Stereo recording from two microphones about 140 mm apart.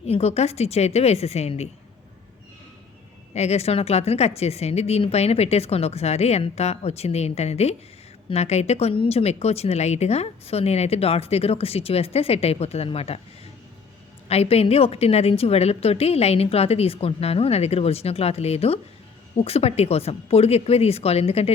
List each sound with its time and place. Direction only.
0.0 s a woman's voice: 50° left (ahead or behind)
3.3 s a woman's voice: 50° left (ahead or behind)
14.3 s a woman's voice: 45° left (ahead or behind)